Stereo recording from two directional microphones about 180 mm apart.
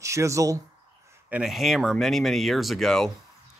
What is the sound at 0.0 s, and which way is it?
Speech, 15° right (ahead or behind).